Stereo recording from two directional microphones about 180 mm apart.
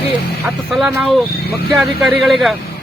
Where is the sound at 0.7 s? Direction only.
Centre (ahead or behind).